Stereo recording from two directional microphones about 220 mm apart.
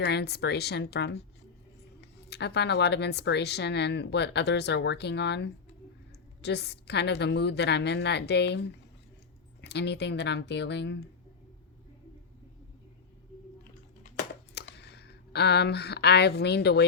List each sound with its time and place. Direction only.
0.0 s speech: 50° left (ahead or behind)
14.5 s speech: 50° left (ahead or behind)